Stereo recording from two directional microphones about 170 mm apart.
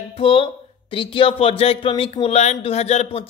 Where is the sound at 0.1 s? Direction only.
35° left (ahead or behind).